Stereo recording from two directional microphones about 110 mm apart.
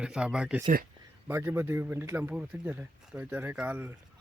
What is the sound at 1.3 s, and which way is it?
Speech, 20° right (ahead or behind).